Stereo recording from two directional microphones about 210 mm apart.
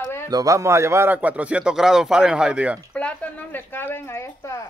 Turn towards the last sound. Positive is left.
turn(degrees=15)  # may be behind; listen again after turning